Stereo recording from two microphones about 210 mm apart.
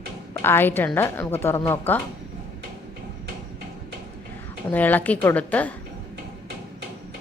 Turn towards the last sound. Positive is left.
turn(degrees=5)  # may be behind; listen again after turning